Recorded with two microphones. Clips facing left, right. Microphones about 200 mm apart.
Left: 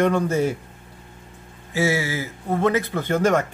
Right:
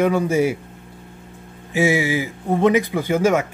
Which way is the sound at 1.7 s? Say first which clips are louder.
Right 4 dB; 15° right (ahead or behind).